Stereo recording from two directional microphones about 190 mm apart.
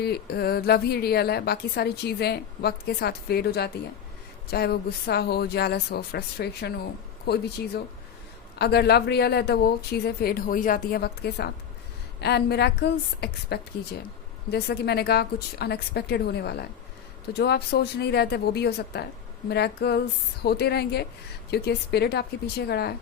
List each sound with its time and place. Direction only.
0.0 s a woman's voice: 55° left (ahead or behind)
8.5 s a woman's voice: 60° left (ahead or behind)